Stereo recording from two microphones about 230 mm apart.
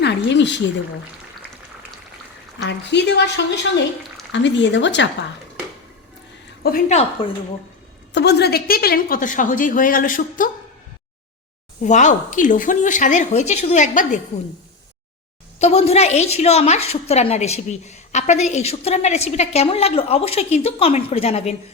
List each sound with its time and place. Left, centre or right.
0.0 s speech: left
2.6 s speech: left
6.6 s speech: left
8.1 s speech: left
11.8 s speech: left
15.5 s a woman's voice: left